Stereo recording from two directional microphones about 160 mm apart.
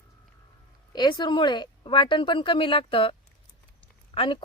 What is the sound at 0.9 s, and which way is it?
A woman's voice, 30° left (ahead or behind).